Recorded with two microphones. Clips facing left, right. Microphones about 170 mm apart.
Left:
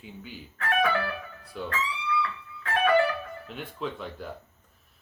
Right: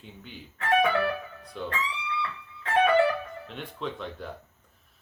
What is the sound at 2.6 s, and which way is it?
Music, 25° right (ahead or behind).